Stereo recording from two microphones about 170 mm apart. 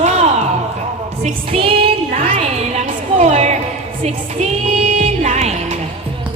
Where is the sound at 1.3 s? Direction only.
35° right (ahead or behind).